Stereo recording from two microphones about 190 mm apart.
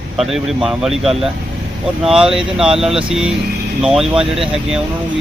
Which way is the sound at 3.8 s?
5° right (ahead or behind).